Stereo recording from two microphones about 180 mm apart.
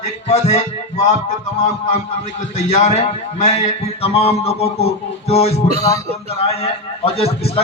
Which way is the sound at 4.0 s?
35° left (ahead or behind).